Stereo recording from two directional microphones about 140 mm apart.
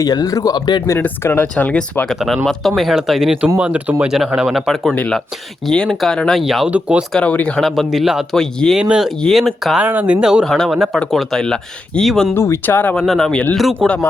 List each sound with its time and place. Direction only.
0.0 s speech: 25° left (ahead or behind)
0.9 s speech: 15° left (ahead or behind); by 7.0 s 10° right (ahead or behind)
7.1 s speech: 10° left (ahead or behind)
9.8 s speech: 10° right (ahead or behind); by 12.3 s 5° left (ahead or behind)
12.3 s speech: 15° left (ahead or behind)